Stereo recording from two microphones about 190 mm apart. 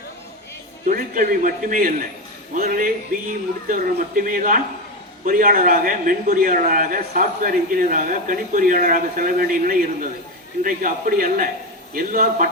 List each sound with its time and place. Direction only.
0.9 s a man's voice: 45° right (ahead or behind)